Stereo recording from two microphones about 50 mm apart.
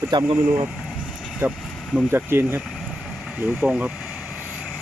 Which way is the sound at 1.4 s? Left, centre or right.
Right.